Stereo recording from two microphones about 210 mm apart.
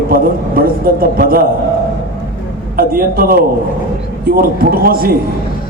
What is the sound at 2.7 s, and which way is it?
A man's voice, 45° right (ahead or behind).